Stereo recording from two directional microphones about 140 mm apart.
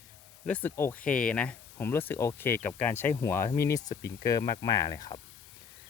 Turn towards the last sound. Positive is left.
turn(degrees=30)  # may be behind; listen again after turning